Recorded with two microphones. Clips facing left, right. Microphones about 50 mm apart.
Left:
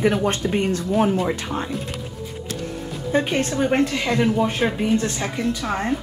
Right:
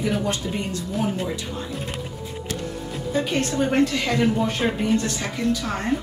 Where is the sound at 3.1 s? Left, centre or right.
Left.